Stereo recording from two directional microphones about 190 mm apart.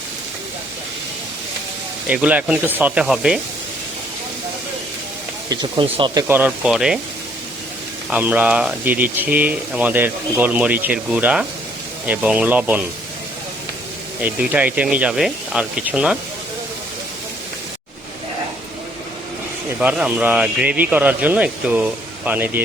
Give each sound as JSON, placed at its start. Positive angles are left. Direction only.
{"t": 2.0, "sound": "speech", "side_deg": -5}
{"t": 5.5, "sound": "speech", "side_deg": -25}
{"t": 6.2, "sound": "speech", "side_deg": -10}
{"t": 8.1, "sound": "speech", "side_deg": -10}
{"t": 14.2, "sound": "speech", "side_deg": -10}
{"t": 19.8, "sound": "speech", "side_deg": -10}